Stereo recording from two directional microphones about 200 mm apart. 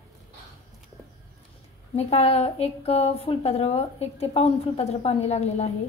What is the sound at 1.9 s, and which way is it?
A woman's voice, 30° left (ahead or behind).